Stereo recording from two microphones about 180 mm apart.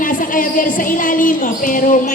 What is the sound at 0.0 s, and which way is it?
Music, 50° left (ahead or behind).